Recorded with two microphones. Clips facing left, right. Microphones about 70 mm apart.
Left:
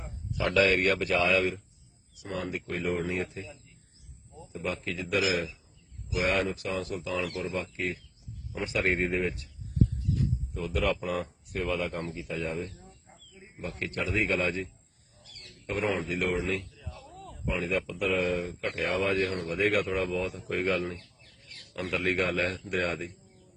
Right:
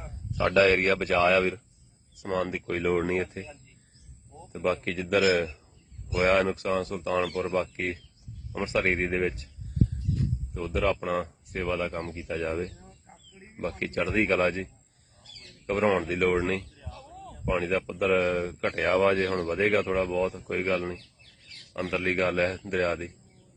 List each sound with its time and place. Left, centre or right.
0.3 s speech: right
2.2 s speech: right
4.5 s speech: right
8.6 s speech: right
10.5 s speech: right
16.9 s a sound: right
17.4 s speech: right; by 20.9 s centre
22.0 s speech: right